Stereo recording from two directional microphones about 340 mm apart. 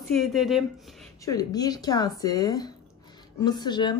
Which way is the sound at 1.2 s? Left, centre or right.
Centre.